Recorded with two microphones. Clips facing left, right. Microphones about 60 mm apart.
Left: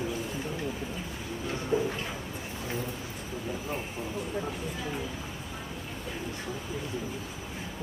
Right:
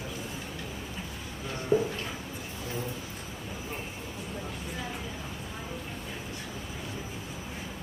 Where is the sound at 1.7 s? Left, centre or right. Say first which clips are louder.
Right 3 dB; centre.